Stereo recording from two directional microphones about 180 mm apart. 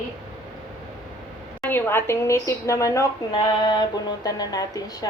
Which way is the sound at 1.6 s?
10° left (ahead or behind).